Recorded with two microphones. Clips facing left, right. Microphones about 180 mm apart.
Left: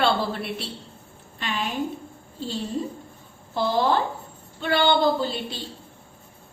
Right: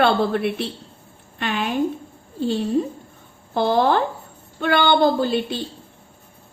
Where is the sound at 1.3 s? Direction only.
65° right (ahead or behind).